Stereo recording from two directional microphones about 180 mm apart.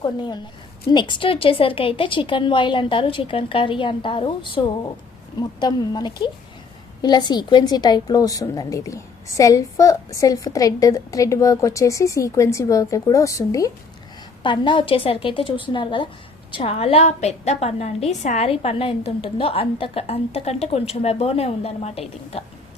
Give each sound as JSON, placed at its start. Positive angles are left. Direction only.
{"t": 0.0, "sound": "a woman's voice", "side_deg": 25}